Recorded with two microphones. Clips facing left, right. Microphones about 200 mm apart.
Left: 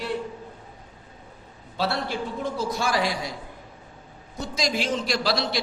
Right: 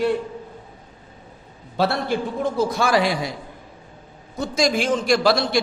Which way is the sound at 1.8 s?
50° right (ahead or behind).